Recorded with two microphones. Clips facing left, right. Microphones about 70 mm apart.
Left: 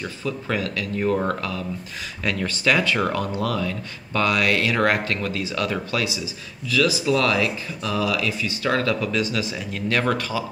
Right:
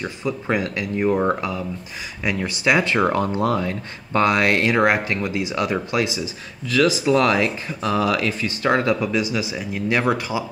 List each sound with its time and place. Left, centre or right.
0.0 s speech: right
4.7 s speech: centre